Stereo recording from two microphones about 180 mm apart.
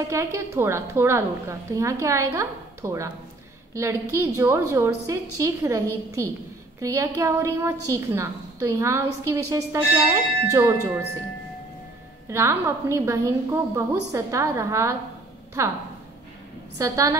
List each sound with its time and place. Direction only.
0.1 s a woman's voice: 15° right (ahead or behind)
12.3 s a woman's voice: 15° right (ahead or behind)
16.7 s a woman's voice: 20° right (ahead or behind)